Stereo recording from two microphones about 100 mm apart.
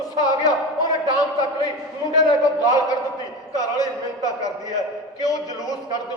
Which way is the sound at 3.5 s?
40° left (ahead or behind).